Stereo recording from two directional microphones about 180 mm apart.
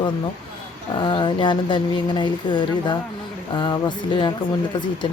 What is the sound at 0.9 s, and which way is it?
Speech, 25° left (ahead or behind).